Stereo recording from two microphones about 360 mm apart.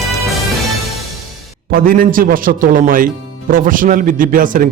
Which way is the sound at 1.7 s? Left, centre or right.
Right.